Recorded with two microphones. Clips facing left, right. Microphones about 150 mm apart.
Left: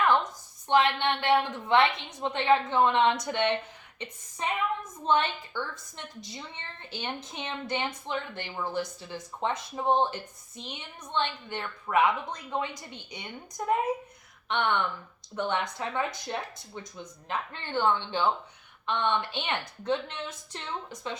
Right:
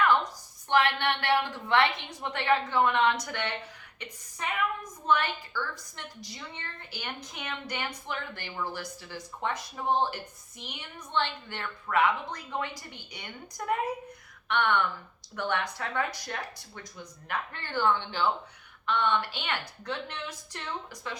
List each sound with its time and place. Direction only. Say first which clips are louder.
0.7 s a woman's voice: left 2 dB; 20° left (ahead or behind)